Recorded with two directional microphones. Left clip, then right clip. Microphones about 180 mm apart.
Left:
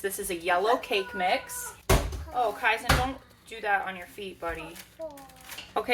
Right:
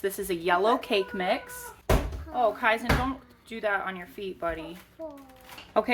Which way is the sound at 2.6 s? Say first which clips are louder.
Even; 55° right (ahead or behind).